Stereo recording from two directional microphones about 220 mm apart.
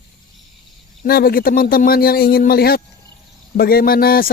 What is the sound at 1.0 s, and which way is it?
Speech, 40° left (ahead or behind).